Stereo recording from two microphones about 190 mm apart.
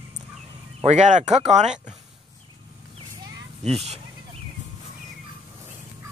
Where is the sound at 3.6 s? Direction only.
35° right (ahead or behind).